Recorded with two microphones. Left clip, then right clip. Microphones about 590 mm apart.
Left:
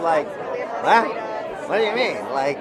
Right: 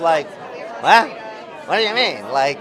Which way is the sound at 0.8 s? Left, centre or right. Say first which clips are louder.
Right 4 dB; right.